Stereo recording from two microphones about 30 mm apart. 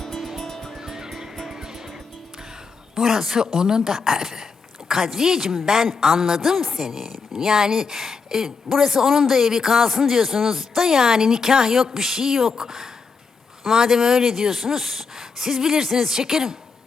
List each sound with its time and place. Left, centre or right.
0.4 s music: centre
0.8 s music: right
3.0 s a woman's voice: centre